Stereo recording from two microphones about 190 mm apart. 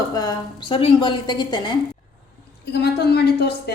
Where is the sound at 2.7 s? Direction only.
60° left (ahead or behind).